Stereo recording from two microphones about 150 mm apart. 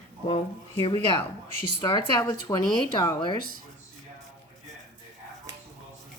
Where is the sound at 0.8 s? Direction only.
35° left (ahead or behind).